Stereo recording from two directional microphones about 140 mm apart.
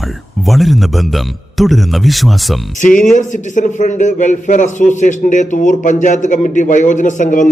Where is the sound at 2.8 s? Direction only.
65° left (ahead or behind).